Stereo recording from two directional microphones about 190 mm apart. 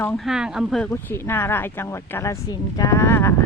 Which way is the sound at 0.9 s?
15° left (ahead or behind).